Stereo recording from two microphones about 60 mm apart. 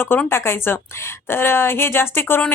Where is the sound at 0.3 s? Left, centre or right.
Left.